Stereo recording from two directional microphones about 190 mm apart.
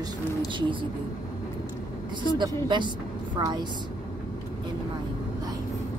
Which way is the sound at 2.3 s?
25° right (ahead or behind).